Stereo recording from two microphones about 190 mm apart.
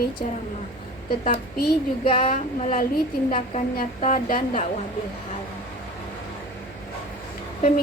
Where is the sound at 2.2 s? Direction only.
45° left (ahead or behind).